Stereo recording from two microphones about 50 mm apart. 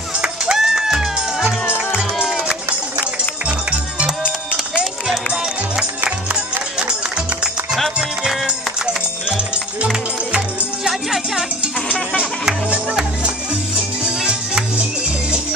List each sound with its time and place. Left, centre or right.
0.2 s music: centre
3.4 s music: right
7.7 s music: centre
10.3 s music: centre
13.7 s music: centre